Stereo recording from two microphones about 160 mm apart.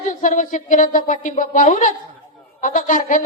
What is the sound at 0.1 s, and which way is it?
Speech, 55° left (ahead or behind).